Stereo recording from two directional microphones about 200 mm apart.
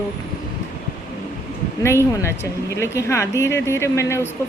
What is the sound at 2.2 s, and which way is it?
Speech, 15° left (ahead or behind).